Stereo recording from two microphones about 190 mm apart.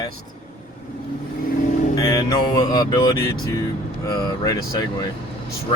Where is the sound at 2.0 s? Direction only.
20° left (ahead or behind).